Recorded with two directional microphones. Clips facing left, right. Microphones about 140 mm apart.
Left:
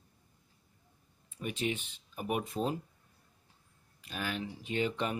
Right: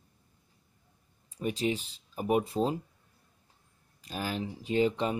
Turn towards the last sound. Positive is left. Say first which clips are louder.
# right 6 dB
turn(degrees=-35)  # may be behind; listen again after turning